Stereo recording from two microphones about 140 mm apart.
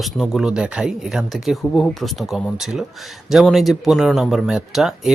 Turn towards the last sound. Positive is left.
turn(degrees=0)  # may be behind; listen again after turning